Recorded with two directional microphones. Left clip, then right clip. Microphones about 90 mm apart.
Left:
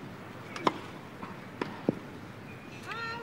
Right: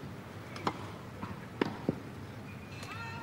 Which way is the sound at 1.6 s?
30° right (ahead or behind).